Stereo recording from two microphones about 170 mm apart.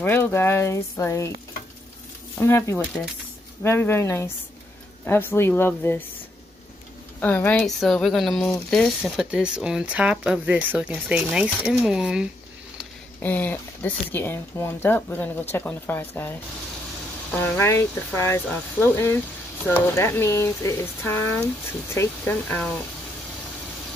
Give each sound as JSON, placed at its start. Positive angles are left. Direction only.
{"t": 0.0, "sound": "speech", "side_deg": 10}
{"t": 2.3, "sound": "speech", "side_deg": 15}
{"t": 7.2, "sound": "speech", "side_deg": 10}
{"t": 13.2, "sound": "speech", "side_deg": 10}